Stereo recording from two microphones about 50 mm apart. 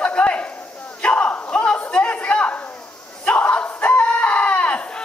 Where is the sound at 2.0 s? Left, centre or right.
Left.